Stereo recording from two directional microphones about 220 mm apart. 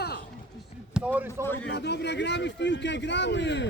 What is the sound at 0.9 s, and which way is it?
Speech, 5° right (ahead or behind).